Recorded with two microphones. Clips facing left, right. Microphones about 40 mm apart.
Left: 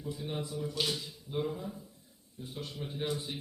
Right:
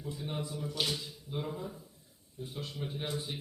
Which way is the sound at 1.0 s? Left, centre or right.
Centre.